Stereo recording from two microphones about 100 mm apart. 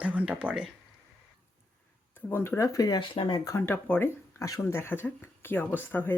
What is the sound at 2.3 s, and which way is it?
Speech, 25° left (ahead or behind).